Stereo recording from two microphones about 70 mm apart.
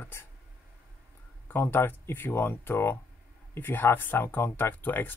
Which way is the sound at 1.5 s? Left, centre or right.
Left.